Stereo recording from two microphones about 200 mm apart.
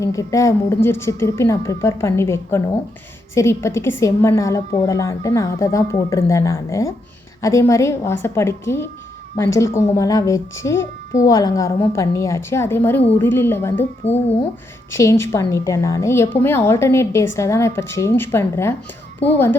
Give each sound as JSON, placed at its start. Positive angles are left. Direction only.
{"t": 0.0, "sound": "a woman's voice", "side_deg": 15}
{"t": 14.0, "sound": "speech", "side_deg": 30}
{"t": 14.9, "sound": "a woman's voice", "side_deg": 15}